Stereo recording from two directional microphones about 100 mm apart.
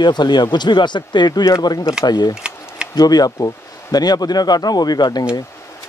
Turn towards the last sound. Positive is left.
turn(degrees=45)  # may be behind; listen again after turning